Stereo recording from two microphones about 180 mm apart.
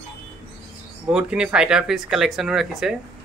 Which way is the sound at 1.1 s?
5° right (ahead or behind).